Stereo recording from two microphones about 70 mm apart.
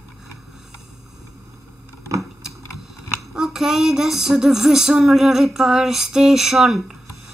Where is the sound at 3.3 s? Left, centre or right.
Centre.